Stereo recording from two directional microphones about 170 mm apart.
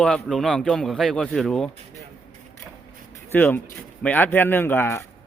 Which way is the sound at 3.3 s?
10° left (ahead or behind).